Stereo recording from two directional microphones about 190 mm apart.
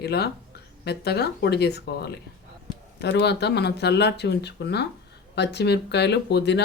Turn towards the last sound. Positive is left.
turn(degrees=65)  # may be behind; listen again after turning